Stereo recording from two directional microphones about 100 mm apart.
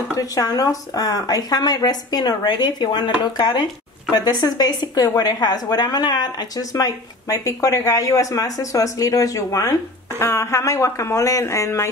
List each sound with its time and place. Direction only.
0.1 s speech: 35° left (ahead or behind)